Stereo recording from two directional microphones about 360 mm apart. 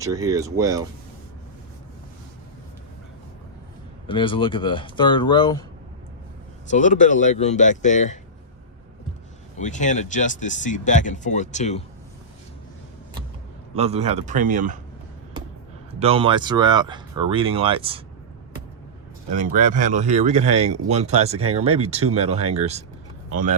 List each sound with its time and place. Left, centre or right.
0.0 s speech: centre
4.0 s speech: centre
6.7 s speech: left
9.6 s speech: centre
13.7 s speech: centre
16.0 s speech: centre
19.4 s speech: right